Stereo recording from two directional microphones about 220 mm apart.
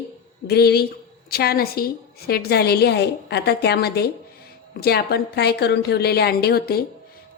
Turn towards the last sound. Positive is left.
turn(degrees=45)  # may be behind; listen again after turning